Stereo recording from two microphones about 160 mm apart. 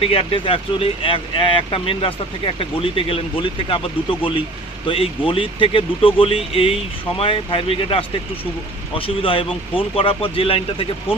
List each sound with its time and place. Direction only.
0.0 s speech: 35° left (ahead or behind)